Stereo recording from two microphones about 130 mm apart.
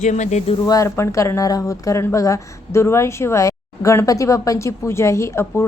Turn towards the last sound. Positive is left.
turn(degrees=20)  # may be behind; listen again after turning